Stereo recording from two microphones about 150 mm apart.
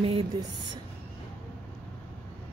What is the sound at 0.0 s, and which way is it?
Speech, 40° right (ahead or behind).